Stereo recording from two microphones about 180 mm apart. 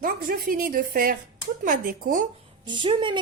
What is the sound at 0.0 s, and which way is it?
A woman's voice, 50° right (ahead or behind).